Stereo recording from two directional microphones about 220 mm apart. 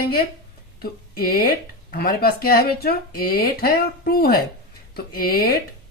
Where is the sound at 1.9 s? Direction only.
40° left (ahead or behind).